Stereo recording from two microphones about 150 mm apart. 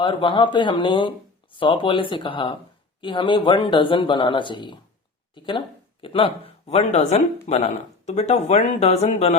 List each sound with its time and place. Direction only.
0.0 s speech: 35° left (ahead or behind)